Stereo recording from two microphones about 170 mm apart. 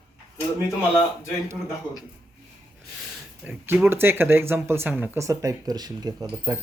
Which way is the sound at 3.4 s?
10° right (ahead or behind).